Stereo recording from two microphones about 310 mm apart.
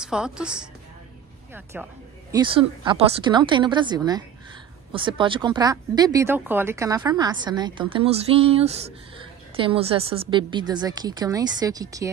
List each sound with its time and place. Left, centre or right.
0.0 s a woman's voice: centre